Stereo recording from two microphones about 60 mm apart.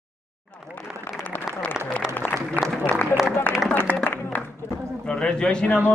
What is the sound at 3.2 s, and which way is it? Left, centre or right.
Speech, centre.